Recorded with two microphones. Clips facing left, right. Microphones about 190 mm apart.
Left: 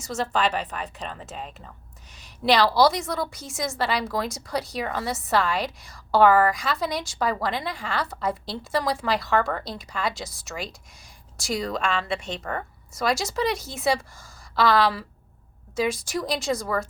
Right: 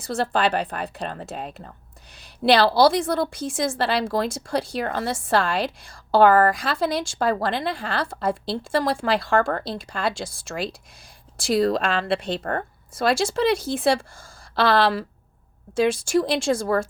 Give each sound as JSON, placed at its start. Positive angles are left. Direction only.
{"t": 0.1, "sound": "a woman's voice", "side_deg": -35}
{"t": 2.5, "sound": "a woman's voice", "side_deg": -30}
{"t": 11.6, "sound": "a woman's voice", "side_deg": -30}
{"t": 12.4, "sound": "speech", "side_deg": -50}
{"t": 12.9, "sound": "a woman's voice", "side_deg": -30}